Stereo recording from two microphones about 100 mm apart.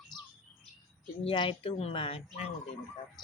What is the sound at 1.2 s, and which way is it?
A woman's voice, 60° left (ahead or behind).